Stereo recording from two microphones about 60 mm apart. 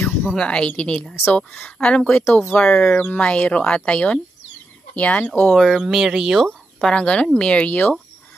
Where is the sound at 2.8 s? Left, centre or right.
Left.